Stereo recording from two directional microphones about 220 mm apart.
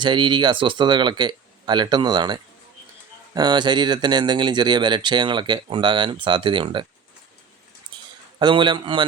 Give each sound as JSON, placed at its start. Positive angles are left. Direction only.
{"t": 0.0, "sound": "speech", "side_deg": -20}
{"t": 8.4, "sound": "speech", "side_deg": -20}